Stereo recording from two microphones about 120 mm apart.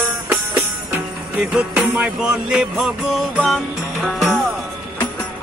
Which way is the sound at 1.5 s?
10° right (ahead or behind).